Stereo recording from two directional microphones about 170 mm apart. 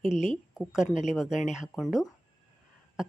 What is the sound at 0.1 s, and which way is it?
Speech, 40° left (ahead or behind).